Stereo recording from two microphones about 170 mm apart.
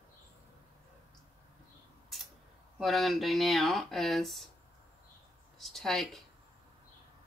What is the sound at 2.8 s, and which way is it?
Speech, centre (ahead or behind).